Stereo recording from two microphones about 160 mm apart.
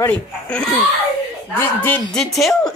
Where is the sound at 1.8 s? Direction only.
5° left (ahead or behind).